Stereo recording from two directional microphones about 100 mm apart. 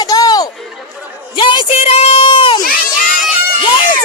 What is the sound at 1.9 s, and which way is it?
Speech, 85° left.